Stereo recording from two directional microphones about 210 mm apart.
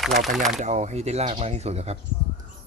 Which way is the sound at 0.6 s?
30° right (ahead or behind).